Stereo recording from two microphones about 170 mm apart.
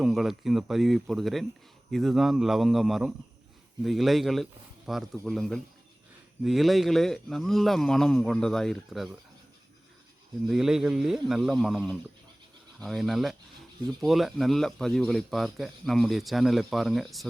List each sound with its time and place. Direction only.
0.0 s speech: centre (ahead or behind)
10.5 s speech: 5° right (ahead or behind)